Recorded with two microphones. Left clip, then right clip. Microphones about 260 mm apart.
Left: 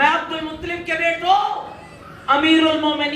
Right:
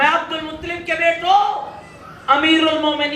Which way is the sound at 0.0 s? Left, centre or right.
Left.